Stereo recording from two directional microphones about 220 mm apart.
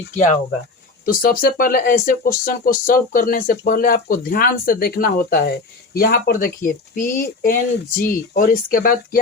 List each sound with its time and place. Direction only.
0.1 s speech: 35° left (ahead or behind)